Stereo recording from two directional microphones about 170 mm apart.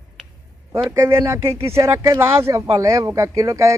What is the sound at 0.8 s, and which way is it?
Speech, 15° right (ahead or behind).